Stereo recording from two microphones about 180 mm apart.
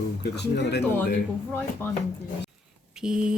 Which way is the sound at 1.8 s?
10° left (ahead or behind).